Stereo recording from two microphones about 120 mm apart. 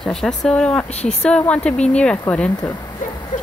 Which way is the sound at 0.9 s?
60° left (ahead or behind).